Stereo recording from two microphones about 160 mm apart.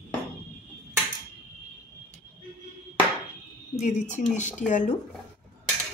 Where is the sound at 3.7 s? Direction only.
50° left (ahead or behind).